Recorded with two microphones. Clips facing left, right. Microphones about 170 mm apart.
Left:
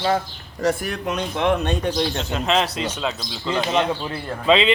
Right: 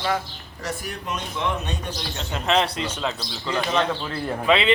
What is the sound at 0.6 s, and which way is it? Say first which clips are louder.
Speech: left 9 dB; 65° left (ahead or behind).